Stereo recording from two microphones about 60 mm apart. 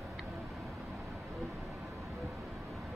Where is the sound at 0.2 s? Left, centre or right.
Centre.